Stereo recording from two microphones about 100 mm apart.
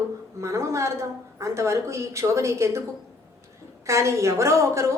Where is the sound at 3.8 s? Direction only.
30° right (ahead or behind).